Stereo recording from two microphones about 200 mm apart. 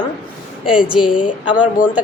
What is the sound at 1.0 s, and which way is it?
Speech, 25° left (ahead or behind).